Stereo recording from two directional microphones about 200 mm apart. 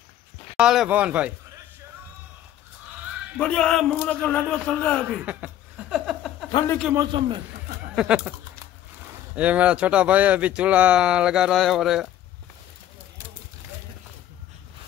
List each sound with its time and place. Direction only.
0.6 s speech: 5° right (ahead or behind)
3.3 s speech: 5° left (ahead or behind)
5.2 s a sound: 5° right (ahead or behind)
6.9 s a man's voice: 20° right (ahead or behind)
7.9 s speech: 5° right (ahead or behind)